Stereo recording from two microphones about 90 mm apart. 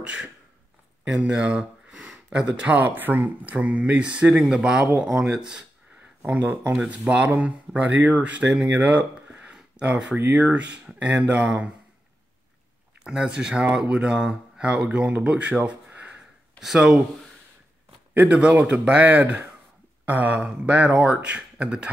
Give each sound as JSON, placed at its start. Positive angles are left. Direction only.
{"t": 0.0, "sound": "a sound", "side_deg": -10}
{"t": 1.0, "sound": "speech", "side_deg": -5}
{"t": 6.2, "sound": "speech", "side_deg": -20}
{"t": 8.8, "sound": "a sound", "side_deg": -20}
{"t": 10.1, "sound": "speech", "side_deg": -15}
{"t": 13.0, "sound": "speech", "side_deg": -10}
{"t": 18.1, "sound": "speech", "side_deg": -15}